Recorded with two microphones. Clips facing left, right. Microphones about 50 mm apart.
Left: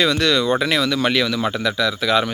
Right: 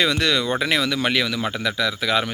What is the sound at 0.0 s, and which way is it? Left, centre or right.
Speech, right.